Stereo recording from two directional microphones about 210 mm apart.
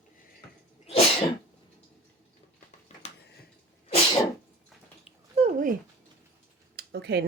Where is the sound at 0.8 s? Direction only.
30° left (ahead or behind).